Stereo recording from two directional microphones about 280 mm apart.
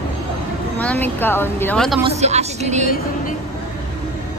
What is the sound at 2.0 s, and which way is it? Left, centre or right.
Vehicle, right.